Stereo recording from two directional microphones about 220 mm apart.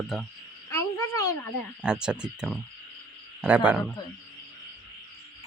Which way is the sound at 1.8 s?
5° right (ahead or behind).